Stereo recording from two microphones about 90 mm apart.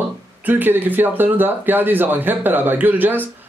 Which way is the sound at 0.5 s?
20° right (ahead or behind).